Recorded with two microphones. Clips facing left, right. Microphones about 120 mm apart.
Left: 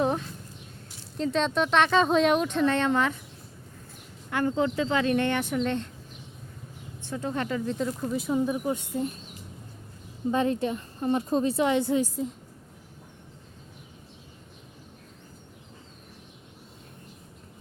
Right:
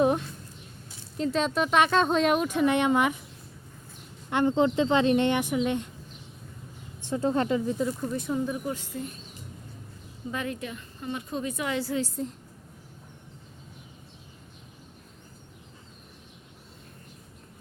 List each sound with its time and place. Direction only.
0.0 s a sound: 10° right (ahead or behind)
1.1 s speech: centre (ahead or behind)
4.3 s a woman's voice: 20° right (ahead or behind)
7.1 s a woman's voice: 30° right (ahead or behind)
7.6 s speech: 10° right (ahead or behind)
8.4 s speech: 20° left (ahead or behind)
10.3 s a woman's voice: 30° left (ahead or behind)